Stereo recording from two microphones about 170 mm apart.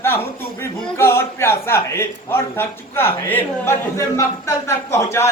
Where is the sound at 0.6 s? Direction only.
15° left (ahead or behind).